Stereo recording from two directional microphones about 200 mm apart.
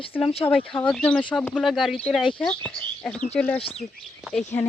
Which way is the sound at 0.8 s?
5° left (ahead or behind).